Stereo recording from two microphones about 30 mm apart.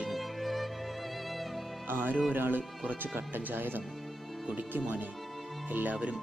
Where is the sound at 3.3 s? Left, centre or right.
Right.